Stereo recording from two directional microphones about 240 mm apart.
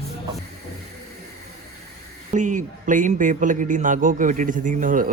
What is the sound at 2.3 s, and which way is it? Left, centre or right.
A man's voice, right.